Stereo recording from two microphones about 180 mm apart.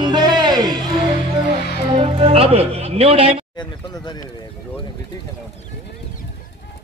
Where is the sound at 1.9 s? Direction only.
30° right (ahead or behind).